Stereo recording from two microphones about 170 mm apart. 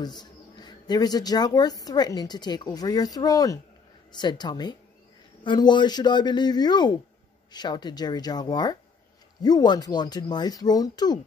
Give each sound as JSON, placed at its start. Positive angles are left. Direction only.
{"t": 0.0, "sound": "speech", "side_deg": 25}